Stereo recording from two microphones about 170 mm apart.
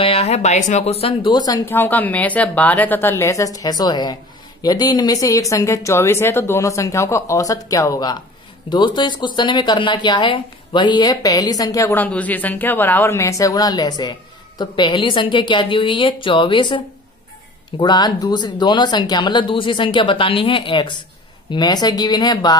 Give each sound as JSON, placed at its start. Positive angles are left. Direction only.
{"t": 0.0, "sound": "speech", "side_deg": 35}
{"t": 1.8, "sound": "a woman's voice", "side_deg": 10}